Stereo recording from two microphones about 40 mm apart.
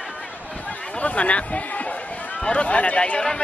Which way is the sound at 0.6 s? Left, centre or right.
Left.